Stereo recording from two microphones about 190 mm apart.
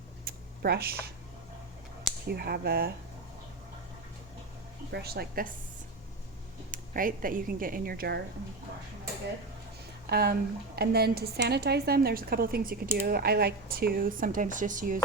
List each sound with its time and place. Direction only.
0.3 s a sound: 55° right (ahead or behind)
2.2 s a woman's voice: 55° right (ahead or behind)
4.9 s a woman's voice: 60° right (ahead or behind)
6.7 s a woman's voice: 45° right (ahead or behind)
10.1 s a woman's voice: 55° right (ahead or behind)